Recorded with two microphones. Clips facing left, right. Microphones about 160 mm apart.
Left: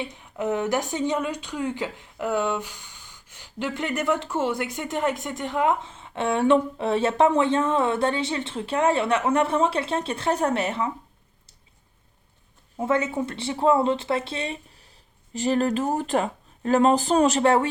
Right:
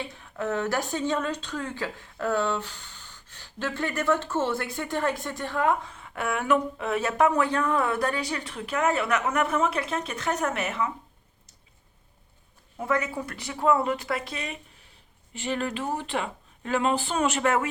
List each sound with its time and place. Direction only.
0.0 s speech: 20° left (ahead or behind)
12.7 s speech: 25° left (ahead or behind)